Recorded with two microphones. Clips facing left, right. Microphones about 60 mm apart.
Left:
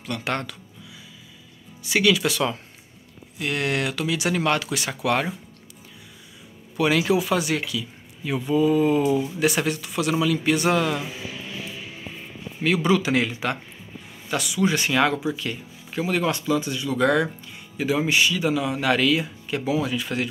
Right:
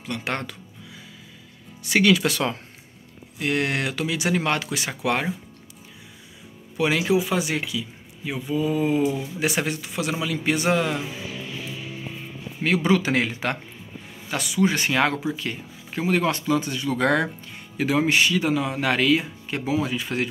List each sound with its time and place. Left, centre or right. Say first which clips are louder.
0.0 s speech: left 1 dB; right
1.8 s speech: right 1 dB; right
6.8 s speech: left 1 dB; centre
8.3 s speech: left 4 dB; centre
9.4 s speech: left 2 dB; right
12.6 s speech: even; right